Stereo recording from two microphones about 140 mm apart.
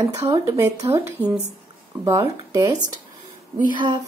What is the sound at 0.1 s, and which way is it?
Speech, 20° right (ahead or behind).